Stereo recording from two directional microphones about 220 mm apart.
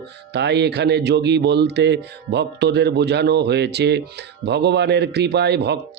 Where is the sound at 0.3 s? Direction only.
50° right (ahead or behind).